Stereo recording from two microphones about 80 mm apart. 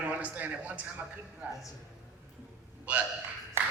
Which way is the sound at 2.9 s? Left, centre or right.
Centre.